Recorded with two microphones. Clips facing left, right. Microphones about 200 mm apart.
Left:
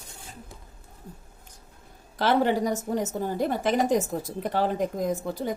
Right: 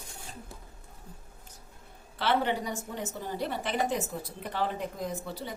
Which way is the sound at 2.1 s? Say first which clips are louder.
Left 6 dB; 45° left (ahead or behind).